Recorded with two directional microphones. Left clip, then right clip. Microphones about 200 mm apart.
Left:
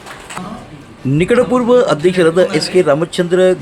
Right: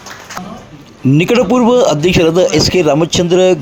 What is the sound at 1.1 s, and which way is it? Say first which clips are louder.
Speech: right 1 dB; 25° right (ahead or behind).